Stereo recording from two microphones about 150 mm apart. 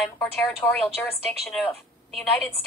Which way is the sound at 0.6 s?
15° left (ahead or behind).